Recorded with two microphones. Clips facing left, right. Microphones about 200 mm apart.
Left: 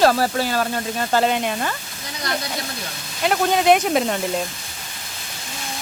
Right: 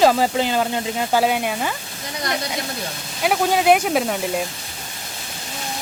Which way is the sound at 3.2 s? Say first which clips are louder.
Even; 5° right (ahead or behind).